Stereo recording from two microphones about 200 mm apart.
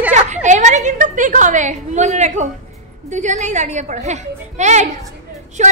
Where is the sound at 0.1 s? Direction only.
35° right (ahead or behind).